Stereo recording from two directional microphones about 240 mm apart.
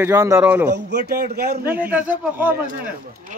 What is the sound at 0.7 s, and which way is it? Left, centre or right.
Speech, right.